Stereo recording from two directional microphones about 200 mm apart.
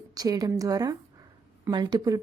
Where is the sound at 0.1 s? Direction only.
20° right (ahead or behind).